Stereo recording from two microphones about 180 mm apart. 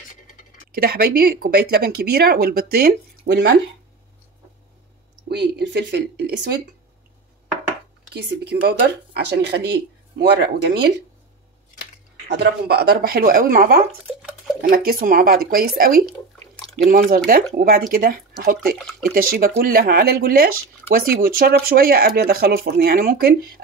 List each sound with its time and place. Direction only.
0.7 s speech: 60° right (ahead or behind)
5.3 s speech: 70° right (ahead or behind)
8.1 s speech: 65° right (ahead or behind)
12.3 s speech: 65° right (ahead or behind)
18.9 s speech: centre (ahead or behind)
19.1 s speech: 55° right (ahead or behind)